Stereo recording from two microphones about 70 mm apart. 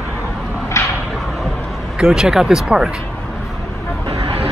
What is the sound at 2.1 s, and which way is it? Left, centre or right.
Speech, centre.